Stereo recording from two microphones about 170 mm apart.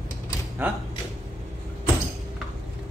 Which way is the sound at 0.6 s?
10° right (ahead or behind).